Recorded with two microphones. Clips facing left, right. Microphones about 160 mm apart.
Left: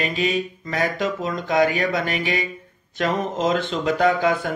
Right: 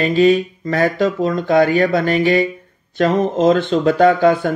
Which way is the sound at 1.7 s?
35° right (ahead or behind).